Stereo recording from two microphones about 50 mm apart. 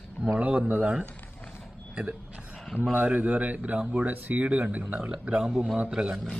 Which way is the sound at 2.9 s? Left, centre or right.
Right.